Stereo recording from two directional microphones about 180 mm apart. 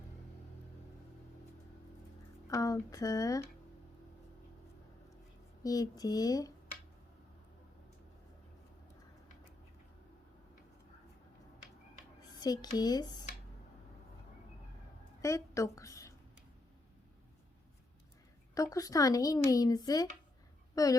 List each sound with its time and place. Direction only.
2.5 s speech: 20° left (ahead or behind)
5.6 s speech: 20° left (ahead or behind)
12.4 s speech: 20° left (ahead or behind)
15.2 s a woman's voice: 15° left (ahead or behind)
18.5 s speech: 20° left (ahead or behind)